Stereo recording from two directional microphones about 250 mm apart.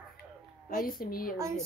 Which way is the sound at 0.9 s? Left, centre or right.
Left.